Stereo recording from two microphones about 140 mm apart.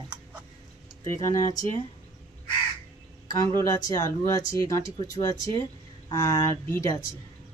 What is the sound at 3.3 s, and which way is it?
Speech, 25° left (ahead or behind).